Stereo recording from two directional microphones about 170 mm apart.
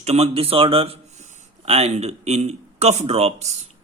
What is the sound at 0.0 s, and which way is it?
Speech, 40° right (ahead or behind).